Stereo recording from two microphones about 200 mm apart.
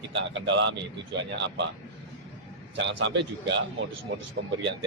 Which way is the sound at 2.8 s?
65° right (ahead or behind).